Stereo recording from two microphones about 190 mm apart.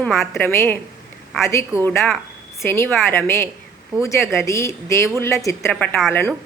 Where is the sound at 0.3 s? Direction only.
10° left (ahead or behind).